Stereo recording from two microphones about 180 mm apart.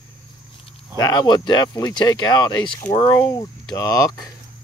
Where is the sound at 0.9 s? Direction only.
20° left (ahead or behind).